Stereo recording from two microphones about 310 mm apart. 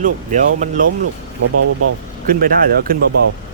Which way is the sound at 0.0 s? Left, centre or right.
Right.